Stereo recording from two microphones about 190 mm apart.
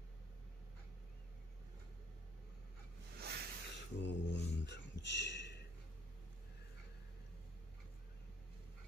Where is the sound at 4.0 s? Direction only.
70° left (ahead or behind).